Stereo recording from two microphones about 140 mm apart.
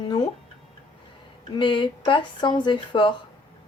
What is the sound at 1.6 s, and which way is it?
Speech, 35° left (ahead or behind).